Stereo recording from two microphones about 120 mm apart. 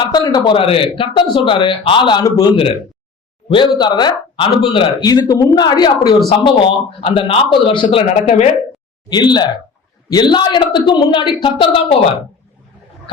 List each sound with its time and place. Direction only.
0.0 s a man's voice: 35° left (ahead or behind)
2.2 s a man's voice: 30° left (ahead or behind)
3.5 s a woman's voice: 40° left (ahead or behind)
5.0 s a woman's voice: 35° left (ahead or behind)
8.1 s speech: 70° left (ahead or behind)
9.0 s a woman's voice: 35° left (ahead or behind)